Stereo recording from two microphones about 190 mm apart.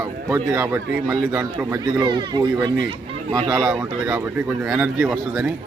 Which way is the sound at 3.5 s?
5° right (ahead or behind).